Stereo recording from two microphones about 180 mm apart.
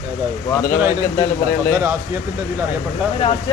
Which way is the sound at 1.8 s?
15° right (ahead or behind).